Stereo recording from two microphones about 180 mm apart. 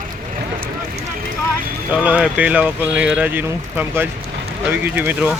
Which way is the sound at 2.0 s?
5° right (ahead or behind).